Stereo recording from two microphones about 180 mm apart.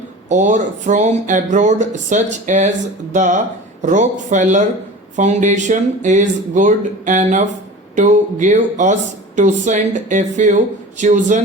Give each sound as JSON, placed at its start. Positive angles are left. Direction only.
{"t": 0.3, "sound": "speech", "side_deg": -45}